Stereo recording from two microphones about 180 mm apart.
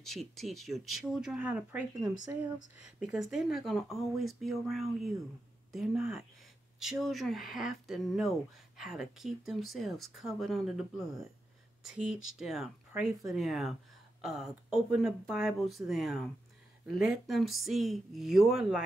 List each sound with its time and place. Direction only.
0.0 s speech: centre (ahead or behind)
16.9 s speech: 60° left (ahead or behind)
17.3 s speech: centre (ahead or behind)